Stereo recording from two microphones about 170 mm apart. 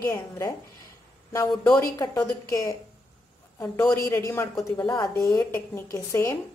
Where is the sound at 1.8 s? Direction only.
20° left (ahead or behind).